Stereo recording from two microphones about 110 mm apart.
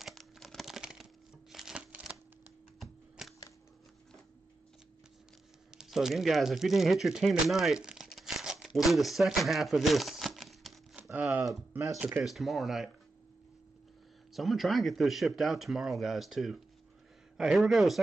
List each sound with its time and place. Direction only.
0.0 s a sound: centre (ahead or behind)
2.8 s typewriter: centre (ahead or behind)
5.7 s speech: 5° right (ahead or behind)
11.0 s crumpling: 15° right (ahead or behind)
11.7 s speech: 30° right (ahead or behind)
12.0 s speech: 10° right (ahead or behind)
14.3 s speech: centre (ahead or behind)